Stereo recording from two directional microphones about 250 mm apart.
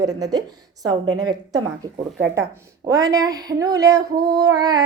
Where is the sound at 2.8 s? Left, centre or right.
Centre.